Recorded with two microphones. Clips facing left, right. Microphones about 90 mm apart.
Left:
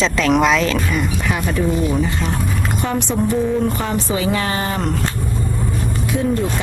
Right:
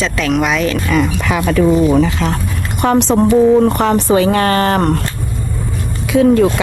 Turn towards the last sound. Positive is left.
turn(degrees=-90)